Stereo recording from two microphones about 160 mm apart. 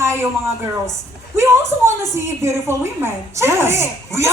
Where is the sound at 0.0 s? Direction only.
15° right (ahead or behind).